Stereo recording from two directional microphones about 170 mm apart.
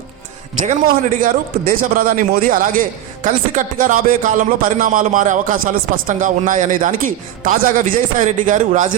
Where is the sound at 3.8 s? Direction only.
50° right (ahead or behind).